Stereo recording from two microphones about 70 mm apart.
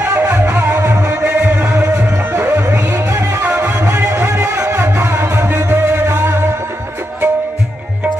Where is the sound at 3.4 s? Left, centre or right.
Right.